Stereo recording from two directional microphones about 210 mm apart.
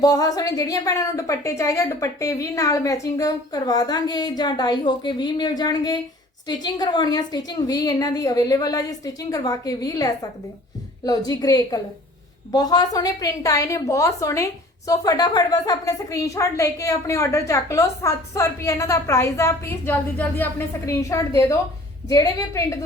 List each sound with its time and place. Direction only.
0.0 s a woman's voice: 15° left (ahead or behind)